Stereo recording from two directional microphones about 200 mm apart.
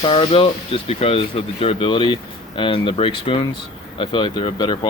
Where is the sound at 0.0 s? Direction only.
25° left (ahead or behind).